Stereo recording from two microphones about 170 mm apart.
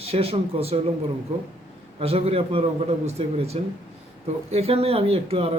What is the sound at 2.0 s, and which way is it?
Speech, 35° right (ahead or behind).